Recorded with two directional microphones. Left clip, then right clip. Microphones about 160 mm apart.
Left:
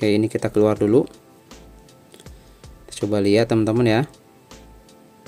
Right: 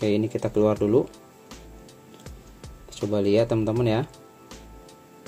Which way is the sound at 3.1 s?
40° left (ahead or behind).